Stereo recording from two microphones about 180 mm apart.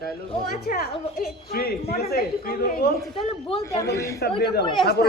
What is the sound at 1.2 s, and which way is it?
A man's voice, 55° left (ahead or behind).